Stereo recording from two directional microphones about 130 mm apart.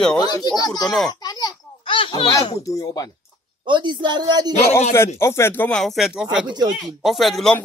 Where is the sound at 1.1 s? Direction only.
30° left (ahead or behind).